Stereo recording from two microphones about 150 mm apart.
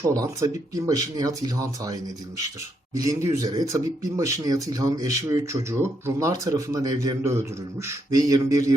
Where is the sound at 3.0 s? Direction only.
20° right (ahead or behind).